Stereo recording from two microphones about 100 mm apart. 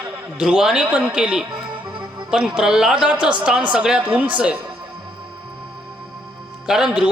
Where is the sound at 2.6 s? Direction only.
5° right (ahead or behind).